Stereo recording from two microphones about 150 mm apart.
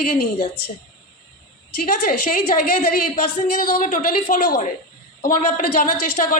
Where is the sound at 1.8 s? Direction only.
70° left (ahead or behind).